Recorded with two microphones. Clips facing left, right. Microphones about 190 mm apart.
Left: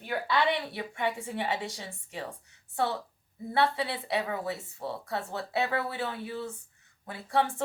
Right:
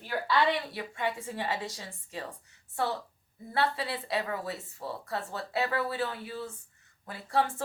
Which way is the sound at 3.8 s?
25° left (ahead or behind).